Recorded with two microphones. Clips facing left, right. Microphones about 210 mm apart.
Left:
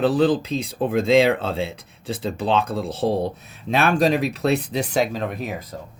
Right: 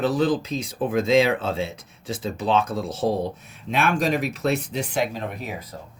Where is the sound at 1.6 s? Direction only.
30° left (ahead or behind).